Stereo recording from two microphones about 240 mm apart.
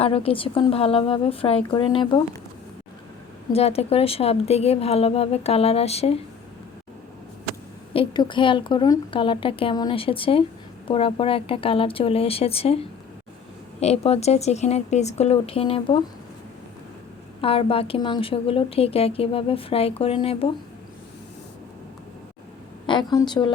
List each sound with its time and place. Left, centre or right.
0.0 s a woman's voice: left
3.5 s a woman's voice: left
7.9 s a woman's voice: centre
17.4 s a woman's voice: left
22.9 s a woman's voice: centre